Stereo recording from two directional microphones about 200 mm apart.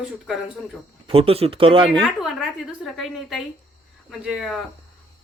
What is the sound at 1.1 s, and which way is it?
Speech, 30° right (ahead or behind).